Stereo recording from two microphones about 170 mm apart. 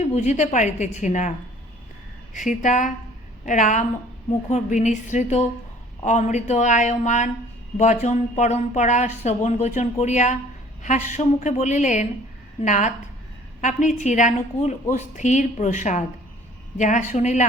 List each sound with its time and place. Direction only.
0.1 s a woman's voice: 45° left (ahead or behind)
2.3 s a woman's voice: 45° left (ahead or behind)